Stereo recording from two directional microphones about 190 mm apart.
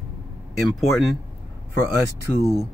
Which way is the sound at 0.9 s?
Centre (ahead or behind).